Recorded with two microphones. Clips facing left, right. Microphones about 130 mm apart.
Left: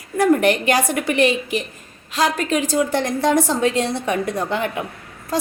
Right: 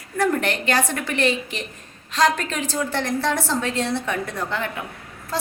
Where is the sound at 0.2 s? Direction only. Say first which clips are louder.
Left 6 dB; 15° left (ahead or behind).